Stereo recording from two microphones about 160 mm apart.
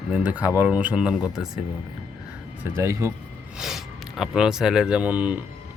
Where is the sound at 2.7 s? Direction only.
15° right (ahead or behind).